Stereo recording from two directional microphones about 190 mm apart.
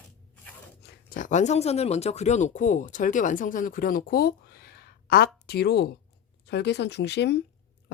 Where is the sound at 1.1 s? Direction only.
45° left (ahead or behind).